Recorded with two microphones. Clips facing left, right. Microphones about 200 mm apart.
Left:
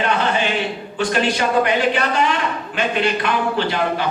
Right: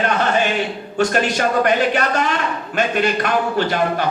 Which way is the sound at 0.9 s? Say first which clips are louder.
Right 2 dB; 45° right (ahead or behind).